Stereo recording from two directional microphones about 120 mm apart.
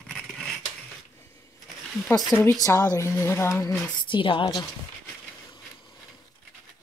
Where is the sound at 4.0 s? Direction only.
40° left (ahead or behind).